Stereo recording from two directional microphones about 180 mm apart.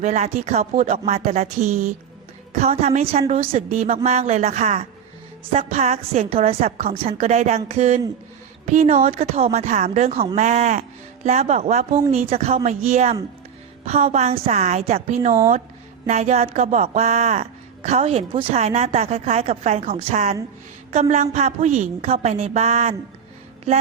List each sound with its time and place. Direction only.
0.0 s a woman's voice: 40° right (ahead or behind)
0.6 s speech: 50° right (ahead or behind)
0.9 s a woman's voice: 35° right (ahead or behind)